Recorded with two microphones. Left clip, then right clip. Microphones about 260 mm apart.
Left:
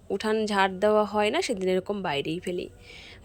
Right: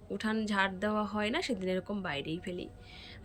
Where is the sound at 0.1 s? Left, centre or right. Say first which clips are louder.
Left 9 dB; centre.